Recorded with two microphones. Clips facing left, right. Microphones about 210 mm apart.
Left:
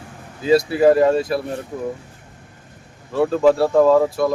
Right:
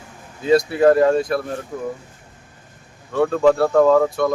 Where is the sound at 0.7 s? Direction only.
5° left (ahead or behind).